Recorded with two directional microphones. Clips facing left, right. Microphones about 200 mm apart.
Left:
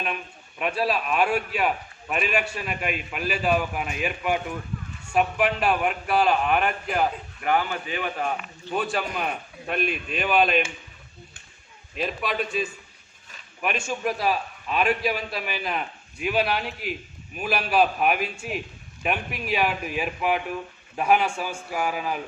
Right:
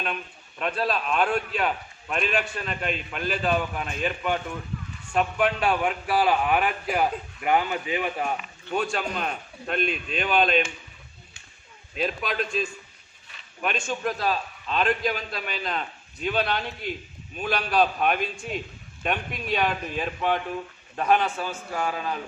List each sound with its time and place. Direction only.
0.6 s a man's voice: 5° left (ahead or behind)
7.4 s a man's voice: 15° right (ahead or behind)
8.7 s a man's voice: centre (ahead or behind)
11.9 s a man's voice: centre (ahead or behind)